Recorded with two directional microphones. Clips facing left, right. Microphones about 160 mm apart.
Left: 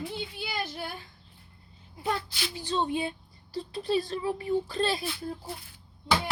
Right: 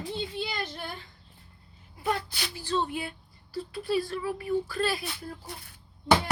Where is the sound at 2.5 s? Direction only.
15° left (ahead or behind).